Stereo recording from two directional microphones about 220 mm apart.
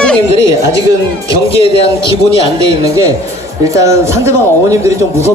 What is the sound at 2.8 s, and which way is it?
Speech, 15° right (ahead or behind).